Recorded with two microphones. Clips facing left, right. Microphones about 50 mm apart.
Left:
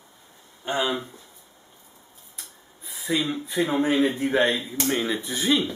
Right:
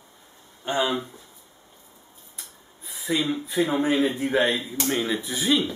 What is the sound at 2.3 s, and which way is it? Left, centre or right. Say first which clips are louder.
A man's voice: even; centre.